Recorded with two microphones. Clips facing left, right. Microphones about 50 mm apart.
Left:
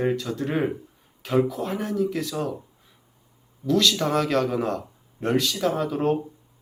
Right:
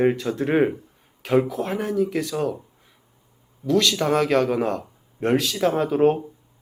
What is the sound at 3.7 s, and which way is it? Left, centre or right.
A man's voice, centre.